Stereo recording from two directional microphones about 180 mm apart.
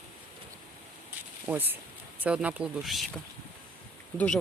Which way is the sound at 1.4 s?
10° right (ahead or behind).